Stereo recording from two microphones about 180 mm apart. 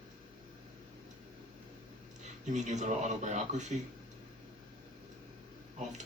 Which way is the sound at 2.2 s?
40° right (ahead or behind).